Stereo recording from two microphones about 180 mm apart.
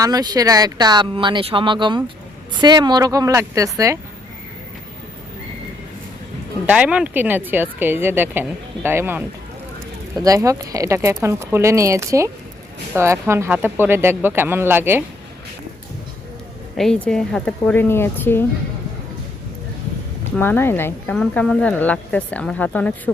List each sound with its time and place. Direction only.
0.0 s speech: 20° right (ahead or behind)
6.7 s speech: 5° right (ahead or behind)
16.7 s speech: 5° left (ahead or behind)
20.3 s speech: 10° left (ahead or behind)